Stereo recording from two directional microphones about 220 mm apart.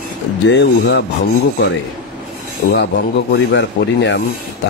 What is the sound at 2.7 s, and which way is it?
Speech, 50° left (ahead or behind).